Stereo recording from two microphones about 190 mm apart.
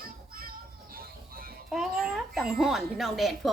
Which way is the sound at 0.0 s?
50° right (ahead or behind).